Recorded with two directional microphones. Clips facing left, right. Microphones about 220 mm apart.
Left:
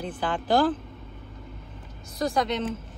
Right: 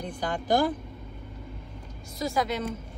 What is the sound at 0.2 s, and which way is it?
Speech, 40° right (ahead or behind).